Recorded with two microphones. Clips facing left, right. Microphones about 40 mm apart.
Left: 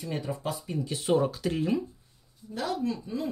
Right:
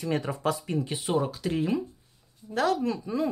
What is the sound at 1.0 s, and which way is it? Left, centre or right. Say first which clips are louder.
Speech: left 5 dB; centre.